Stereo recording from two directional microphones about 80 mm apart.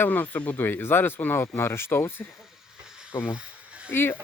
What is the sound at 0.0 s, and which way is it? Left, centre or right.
Speech, left.